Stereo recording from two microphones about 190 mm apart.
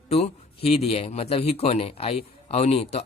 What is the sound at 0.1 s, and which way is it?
Speech, 30° left (ahead or behind).